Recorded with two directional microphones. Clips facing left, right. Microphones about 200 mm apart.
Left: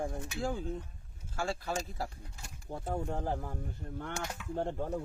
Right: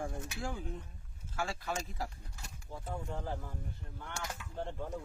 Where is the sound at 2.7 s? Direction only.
55° left (ahead or behind).